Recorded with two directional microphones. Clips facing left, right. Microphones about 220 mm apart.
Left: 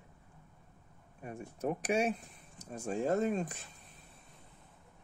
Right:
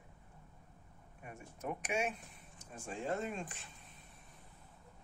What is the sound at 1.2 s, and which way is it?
Speech, 35° left (ahead or behind).